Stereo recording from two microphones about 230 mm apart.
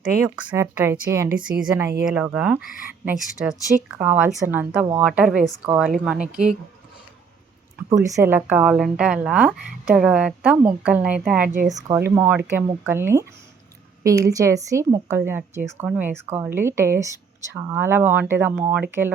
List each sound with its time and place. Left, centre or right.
0.0 s speech: centre
2.6 s speech: left
3.0 s speech: centre
7.9 s speech: centre